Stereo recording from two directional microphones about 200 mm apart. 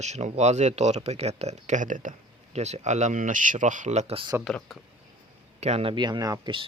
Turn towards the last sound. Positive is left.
turn(degrees=-25)  # may be behind; listen again after turning